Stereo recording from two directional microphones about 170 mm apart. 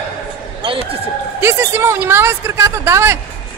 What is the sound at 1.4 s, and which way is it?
A woman's voice, 15° right (ahead or behind).